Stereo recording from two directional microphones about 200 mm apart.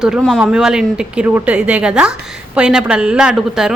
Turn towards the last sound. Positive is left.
turn(degrees=0)  # may be behind; listen again after turning